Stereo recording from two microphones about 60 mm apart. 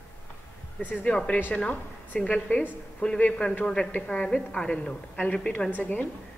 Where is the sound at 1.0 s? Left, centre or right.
Centre.